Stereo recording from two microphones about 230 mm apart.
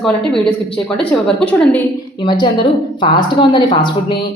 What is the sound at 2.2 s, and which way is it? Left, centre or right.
A woman's voice, centre.